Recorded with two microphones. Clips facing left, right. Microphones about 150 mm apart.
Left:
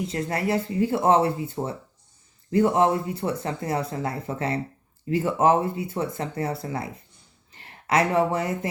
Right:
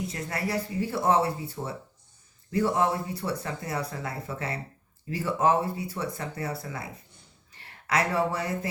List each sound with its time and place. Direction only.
0.0 s speech: 25° left (ahead or behind)